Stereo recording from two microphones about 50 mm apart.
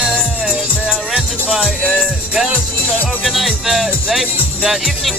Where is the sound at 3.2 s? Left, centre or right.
Centre.